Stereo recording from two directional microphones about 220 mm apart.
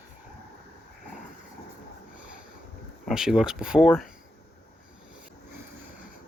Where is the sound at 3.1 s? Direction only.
Centre (ahead or behind).